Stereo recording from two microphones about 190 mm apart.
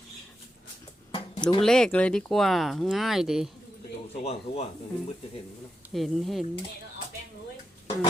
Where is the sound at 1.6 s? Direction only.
5° left (ahead or behind).